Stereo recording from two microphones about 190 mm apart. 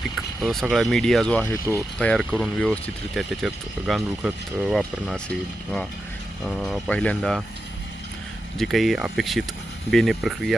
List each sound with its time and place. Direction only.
0.2 s speech: 5° right (ahead or behind)
6.5 s speech: centre (ahead or behind)
8.5 s speech: centre (ahead or behind)